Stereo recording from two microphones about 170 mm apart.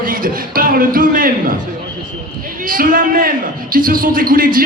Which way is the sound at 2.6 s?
55° right (ahead or behind).